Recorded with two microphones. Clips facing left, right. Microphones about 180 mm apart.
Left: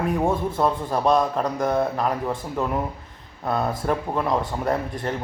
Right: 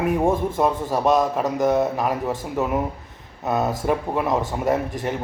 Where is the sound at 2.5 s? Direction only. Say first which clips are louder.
Right 3 dB; 5° right (ahead or behind).